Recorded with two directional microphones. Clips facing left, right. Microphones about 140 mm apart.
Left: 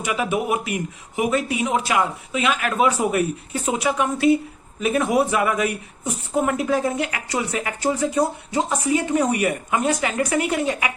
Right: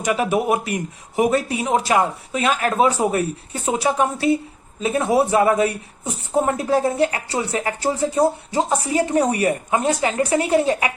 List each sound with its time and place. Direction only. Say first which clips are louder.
0.0 s a man's voice: right 3 dB; 40° right (ahead or behind)